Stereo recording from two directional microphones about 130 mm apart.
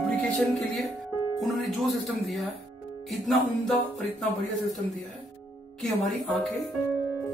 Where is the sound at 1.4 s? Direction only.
Centre (ahead or behind).